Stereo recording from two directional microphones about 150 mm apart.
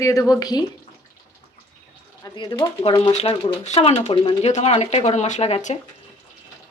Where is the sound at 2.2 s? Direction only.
30° left (ahead or behind).